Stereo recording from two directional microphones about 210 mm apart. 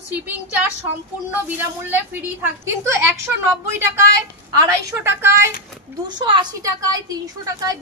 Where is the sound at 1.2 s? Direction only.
10° right (ahead or behind).